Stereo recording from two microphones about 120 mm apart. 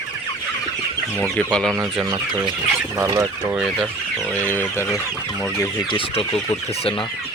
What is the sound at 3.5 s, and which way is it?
Speech, 5° right (ahead or behind).